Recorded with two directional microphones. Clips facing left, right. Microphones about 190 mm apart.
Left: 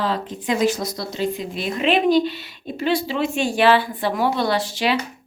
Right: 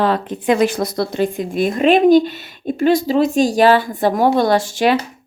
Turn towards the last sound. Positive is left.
turn(degrees=-50)  # may be behind; listen again after turning